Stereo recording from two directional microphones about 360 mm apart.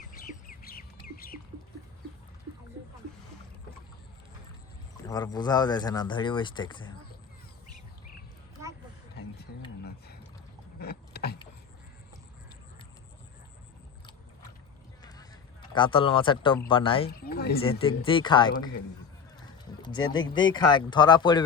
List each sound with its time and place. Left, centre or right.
0.0 s bird: left
5.0 s speech: centre
10.8 s vehicle: left
15.7 s speech: centre
17.1 s a sound: left
17.6 s speech: centre